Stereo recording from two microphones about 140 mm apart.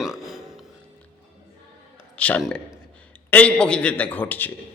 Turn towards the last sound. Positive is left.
turn(degrees=15)  # may be behind; listen again after turning